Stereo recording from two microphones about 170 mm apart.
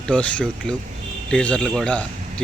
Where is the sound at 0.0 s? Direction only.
5° left (ahead or behind).